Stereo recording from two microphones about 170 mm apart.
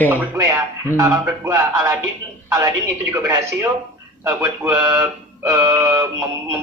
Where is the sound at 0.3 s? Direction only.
15° right (ahead or behind).